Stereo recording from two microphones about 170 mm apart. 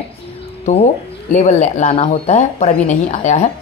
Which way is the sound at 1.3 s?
45° left (ahead or behind).